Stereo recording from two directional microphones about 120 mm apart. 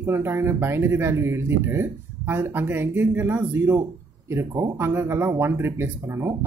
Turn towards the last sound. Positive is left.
turn(degrees=-20)  # may be behind; listen again after turning